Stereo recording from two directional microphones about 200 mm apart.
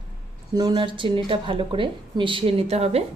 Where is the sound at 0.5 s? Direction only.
20° right (ahead or behind).